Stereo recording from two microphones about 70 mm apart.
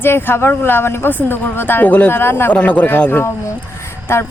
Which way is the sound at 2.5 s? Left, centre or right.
Left.